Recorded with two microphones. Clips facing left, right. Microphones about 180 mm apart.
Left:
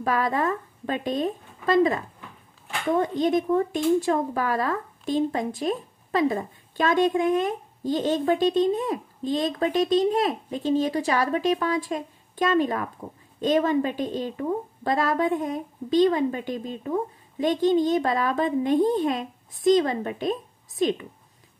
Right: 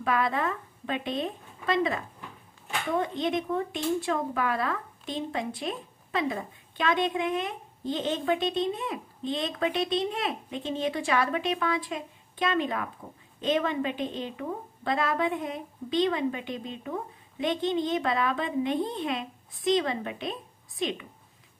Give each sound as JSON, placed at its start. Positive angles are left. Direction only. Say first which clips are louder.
{"t": 0.0, "sound": "a woman's voice", "louder": "left 3 dB", "side_deg": 40}